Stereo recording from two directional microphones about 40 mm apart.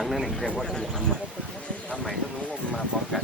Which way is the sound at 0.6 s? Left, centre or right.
Centre.